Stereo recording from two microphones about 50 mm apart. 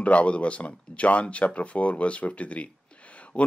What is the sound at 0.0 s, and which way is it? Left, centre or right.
Speech, left.